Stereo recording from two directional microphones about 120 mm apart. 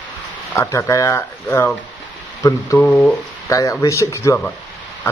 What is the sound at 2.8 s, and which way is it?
Speech, centre (ahead or behind).